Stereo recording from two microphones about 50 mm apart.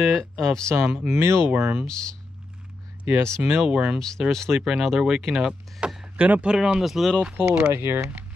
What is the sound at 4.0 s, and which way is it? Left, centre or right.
Speech, centre.